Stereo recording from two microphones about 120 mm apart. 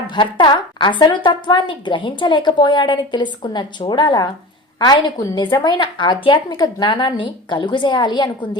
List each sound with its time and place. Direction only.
0.1 s a woman's voice: 40° left (ahead or behind)